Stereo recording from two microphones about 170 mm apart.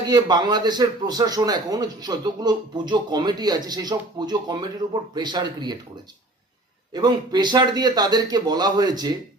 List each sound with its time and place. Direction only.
0.1 s speech: 25° right (ahead or behind)
6.9 s speech: 25° right (ahead or behind)